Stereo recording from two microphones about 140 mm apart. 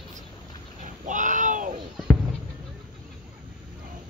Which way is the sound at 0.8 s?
65° right (ahead or behind).